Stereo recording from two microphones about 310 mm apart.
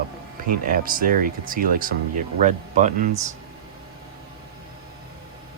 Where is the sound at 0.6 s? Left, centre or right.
Right.